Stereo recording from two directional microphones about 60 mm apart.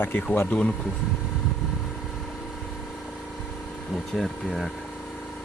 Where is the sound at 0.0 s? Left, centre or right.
Left.